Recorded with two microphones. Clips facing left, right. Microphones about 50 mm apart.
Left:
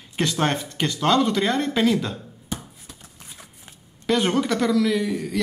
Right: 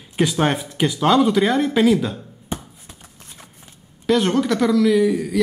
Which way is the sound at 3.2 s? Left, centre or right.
Centre.